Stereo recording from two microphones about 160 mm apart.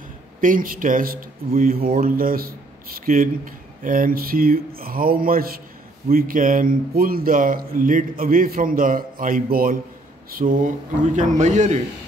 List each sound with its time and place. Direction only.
0.4 s a man's voice: 60° right (ahead or behind)